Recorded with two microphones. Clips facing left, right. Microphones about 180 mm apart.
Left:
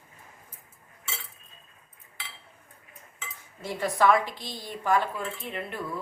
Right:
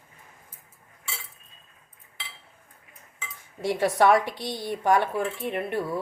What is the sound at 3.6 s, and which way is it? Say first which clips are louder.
Speech: right 4 dB; 80° right.